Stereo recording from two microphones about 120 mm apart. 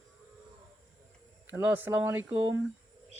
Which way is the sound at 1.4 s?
15° right (ahead or behind).